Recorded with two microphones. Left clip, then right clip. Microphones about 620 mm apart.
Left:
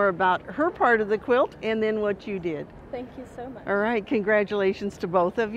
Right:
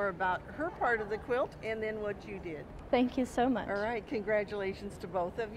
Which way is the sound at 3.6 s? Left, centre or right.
Left.